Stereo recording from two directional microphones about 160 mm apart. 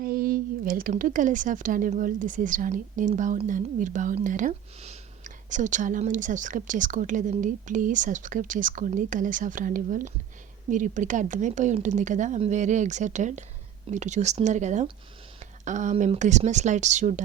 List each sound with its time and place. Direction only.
0.0 s a woman's voice: 65° right (ahead or behind); by 17.2 s 50° right (ahead or behind)